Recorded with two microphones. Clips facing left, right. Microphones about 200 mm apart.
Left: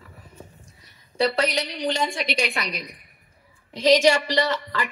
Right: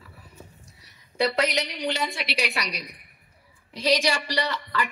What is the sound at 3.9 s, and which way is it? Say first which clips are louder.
Speech: left 7 dB; 45° left (ahead or behind).